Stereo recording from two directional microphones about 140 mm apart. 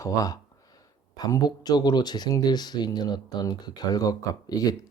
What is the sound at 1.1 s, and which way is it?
Speech, 30° left (ahead or behind).